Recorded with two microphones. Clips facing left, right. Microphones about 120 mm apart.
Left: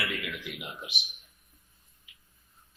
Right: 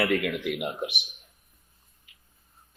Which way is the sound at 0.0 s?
55° right (ahead or behind).